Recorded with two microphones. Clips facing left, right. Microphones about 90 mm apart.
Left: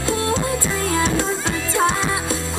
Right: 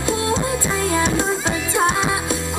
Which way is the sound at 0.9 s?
20° right (ahead or behind).